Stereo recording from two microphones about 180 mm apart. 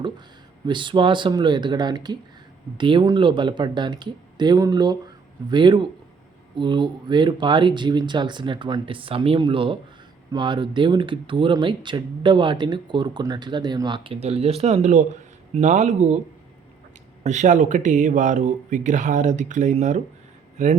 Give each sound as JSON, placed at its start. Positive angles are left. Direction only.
{"t": 0.6, "sound": "speech", "side_deg": -25}
{"t": 17.2, "sound": "speech", "side_deg": -40}